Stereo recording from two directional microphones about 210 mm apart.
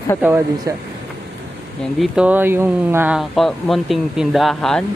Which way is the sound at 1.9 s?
5° right (ahead or behind).